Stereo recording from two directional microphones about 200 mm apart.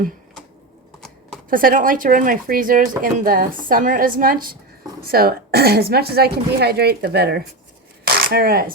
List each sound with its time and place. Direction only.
1.5 s speech: 45° right (ahead or behind)
8.0 s shuffling cards: 50° right (ahead or behind)